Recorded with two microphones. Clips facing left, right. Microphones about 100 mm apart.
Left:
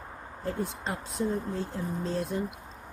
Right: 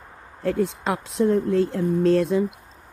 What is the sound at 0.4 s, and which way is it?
Speech, 90° right.